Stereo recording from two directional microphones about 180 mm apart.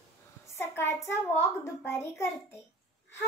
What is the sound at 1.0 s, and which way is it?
A child's voice, 15° left (ahead or behind).